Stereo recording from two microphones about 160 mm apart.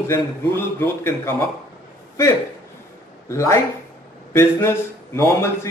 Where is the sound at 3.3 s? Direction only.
20° left (ahead or behind).